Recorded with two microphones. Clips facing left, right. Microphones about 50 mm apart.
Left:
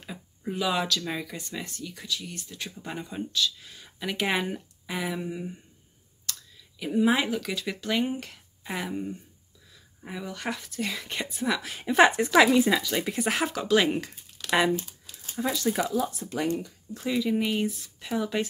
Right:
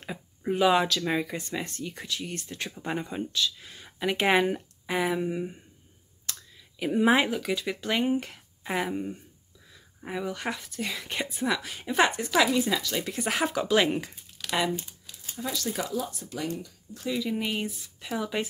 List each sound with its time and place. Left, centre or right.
0.0 s a sound: right
1.0 s speech: right
2.6 s speech: right
6.3 s clicking: right
6.8 s speech: centre
7.4 s speech: centre
12.4 s speech: left
13.2 s speech: centre
15.5 s speech: centre
17.1 s speech: centre